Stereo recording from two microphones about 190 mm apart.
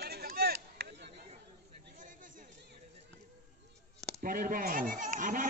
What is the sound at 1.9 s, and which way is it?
Chatter, 45° right (ahead or behind).